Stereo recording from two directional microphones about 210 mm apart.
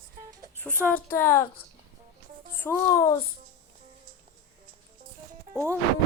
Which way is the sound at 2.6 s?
15° left (ahead or behind).